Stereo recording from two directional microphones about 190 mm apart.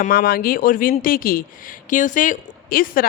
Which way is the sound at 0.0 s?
50° left (ahead or behind).